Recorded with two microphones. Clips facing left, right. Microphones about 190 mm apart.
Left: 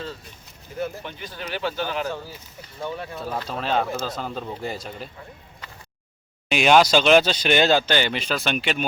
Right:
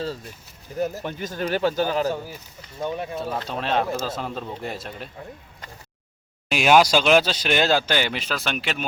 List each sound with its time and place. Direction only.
0.8 s speech: 45° right (ahead or behind)
2.8 s speech: 20° right (ahead or behind)
3.5 s speech: centre (ahead or behind)
6.5 s speech: 5° right (ahead or behind)